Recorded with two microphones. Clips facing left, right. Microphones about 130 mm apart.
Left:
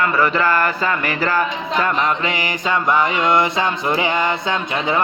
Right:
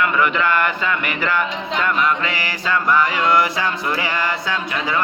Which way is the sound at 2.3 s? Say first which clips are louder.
Left 2 dB; 20° left (ahead or behind).